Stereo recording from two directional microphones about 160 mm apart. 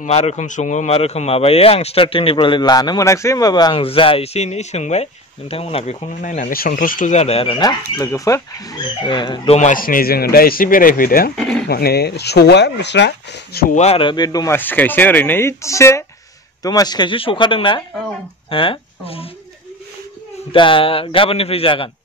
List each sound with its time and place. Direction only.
0.0 s a man's voice: 45° left (ahead or behind)
6.2 s a man's voice: 55° left (ahead or behind); by 9.6 s 30° left (ahead or behind)
9.6 s speech: 55° left (ahead or behind)
11.3 s speech: 5° left (ahead or behind)
11.6 s speech: 80° left
13.7 s speech: 35° left (ahead or behind)
14.6 s speech: 10° left (ahead or behind); by 19.2 s 35° left (ahead or behind)
20.5 s a man's voice: 30° left (ahead or behind)